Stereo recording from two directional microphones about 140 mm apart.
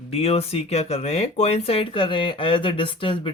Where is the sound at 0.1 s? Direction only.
45° left (ahead or behind).